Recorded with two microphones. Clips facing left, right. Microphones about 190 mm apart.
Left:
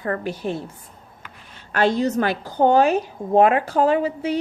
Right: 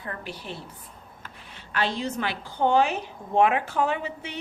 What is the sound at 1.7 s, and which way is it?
A woman's voice, 45° left (ahead or behind).